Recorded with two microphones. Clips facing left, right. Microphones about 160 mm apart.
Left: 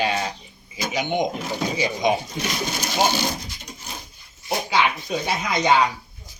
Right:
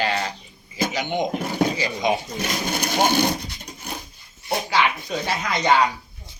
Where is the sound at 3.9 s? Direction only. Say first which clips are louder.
Right 5 dB; 60° right (ahead or behind).